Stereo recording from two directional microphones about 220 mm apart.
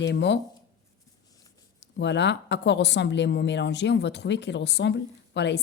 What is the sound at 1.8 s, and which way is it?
Speech, 55° left (ahead or behind).